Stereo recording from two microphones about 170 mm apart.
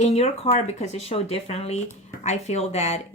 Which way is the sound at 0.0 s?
40° left (ahead or behind).